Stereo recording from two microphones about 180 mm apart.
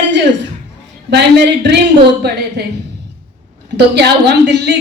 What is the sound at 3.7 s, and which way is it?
Speech, 65° right (ahead or behind).